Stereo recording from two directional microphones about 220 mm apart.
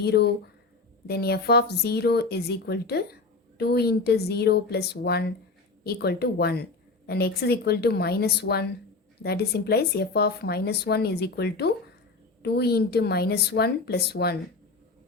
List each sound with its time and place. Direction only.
0.0 s speech: 50° left (ahead or behind)